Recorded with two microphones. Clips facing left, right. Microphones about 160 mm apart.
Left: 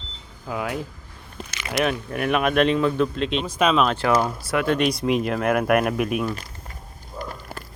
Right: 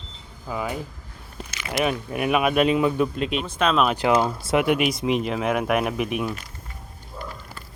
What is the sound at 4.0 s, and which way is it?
Speech, 20° right (ahead or behind).